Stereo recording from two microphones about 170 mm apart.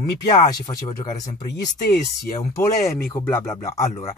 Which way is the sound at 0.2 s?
25° left (ahead or behind).